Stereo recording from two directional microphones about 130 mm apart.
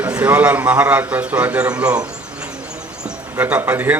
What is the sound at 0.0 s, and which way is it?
A man's voice, 10° right (ahead or behind).